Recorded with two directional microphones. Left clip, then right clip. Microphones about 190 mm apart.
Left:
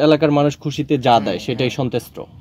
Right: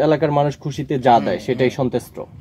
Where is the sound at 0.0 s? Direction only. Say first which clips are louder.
Left 2 dB; 50° left (ahead or behind).